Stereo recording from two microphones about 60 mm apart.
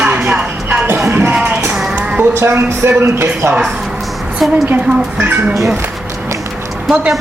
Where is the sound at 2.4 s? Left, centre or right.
Right.